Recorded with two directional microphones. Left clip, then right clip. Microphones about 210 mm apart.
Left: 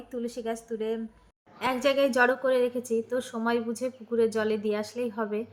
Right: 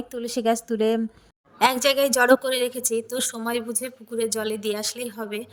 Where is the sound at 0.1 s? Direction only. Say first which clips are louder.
Right 9 dB; 50° right (ahead or behind).